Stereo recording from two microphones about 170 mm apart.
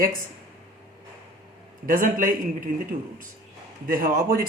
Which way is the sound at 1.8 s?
55° right (ahead or behind).